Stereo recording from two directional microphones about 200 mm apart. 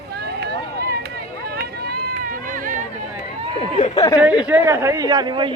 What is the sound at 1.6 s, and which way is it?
Run, 50° right (ahead or behind).